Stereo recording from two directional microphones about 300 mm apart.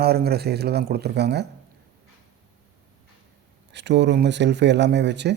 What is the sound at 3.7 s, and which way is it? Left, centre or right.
A man's voice, right.